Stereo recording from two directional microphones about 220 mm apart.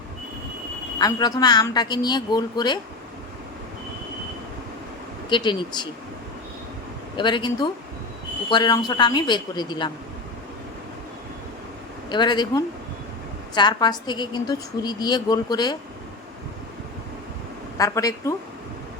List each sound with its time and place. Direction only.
0.9 s a woman's voice: 15° left (ahead or behind)
5.3 s a woman's voice: 20° left (ahead or behind)
7.2 s a woman's voice: 20° left (ahead or behind)
12.0 s a woman's voice: 20° left (ahead or behind)
17.7 s a woman's voice: 15° left (ahead or behind)